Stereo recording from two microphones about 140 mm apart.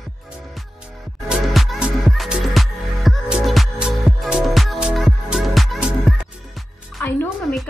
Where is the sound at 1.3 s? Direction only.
Centre (ahead or behind).